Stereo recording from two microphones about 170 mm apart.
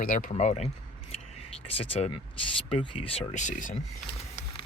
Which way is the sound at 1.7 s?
35° left (ahead or behind).